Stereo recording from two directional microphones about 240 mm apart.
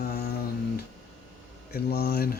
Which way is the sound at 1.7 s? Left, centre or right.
Left.